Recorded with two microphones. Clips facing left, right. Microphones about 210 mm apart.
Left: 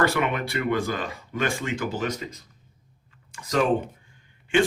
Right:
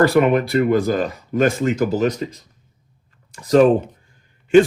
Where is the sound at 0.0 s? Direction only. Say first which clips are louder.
Right 9 dB; 40° right (ahead or behind).